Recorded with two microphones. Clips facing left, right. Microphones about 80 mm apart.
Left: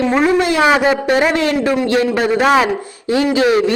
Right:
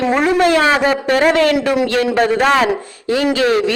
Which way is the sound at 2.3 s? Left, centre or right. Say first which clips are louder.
Left 1 dB; centre.